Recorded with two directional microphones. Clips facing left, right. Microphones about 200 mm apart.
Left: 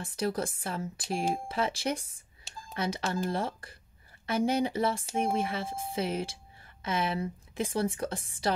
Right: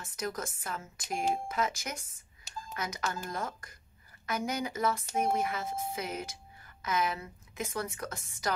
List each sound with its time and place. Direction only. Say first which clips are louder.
0.0 s speech: left 6 dB; 30° left (ahead or behind)